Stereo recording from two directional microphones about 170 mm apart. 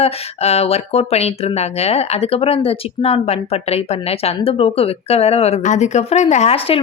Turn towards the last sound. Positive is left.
turn(degrees=40)  # may be behind; listen again after turning